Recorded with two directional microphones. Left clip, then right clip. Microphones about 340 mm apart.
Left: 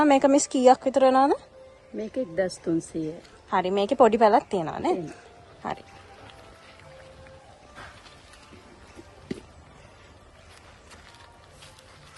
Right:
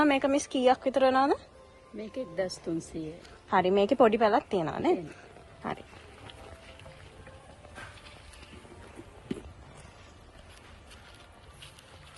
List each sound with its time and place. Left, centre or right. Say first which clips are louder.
0.0 s a woman's voice: left 6 dB; centre
2.4 s speech: left 6 dB; left
3.5 s a woman's voice: left 1 dB; centre